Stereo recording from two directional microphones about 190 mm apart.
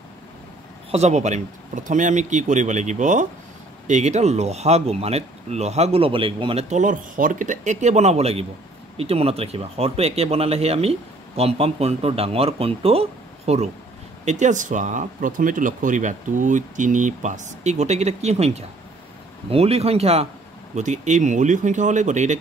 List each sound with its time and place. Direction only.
0.9 s speech: 35° right (ahead or behind)